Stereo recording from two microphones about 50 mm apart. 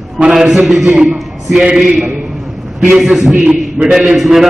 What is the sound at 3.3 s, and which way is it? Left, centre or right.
Speech, right.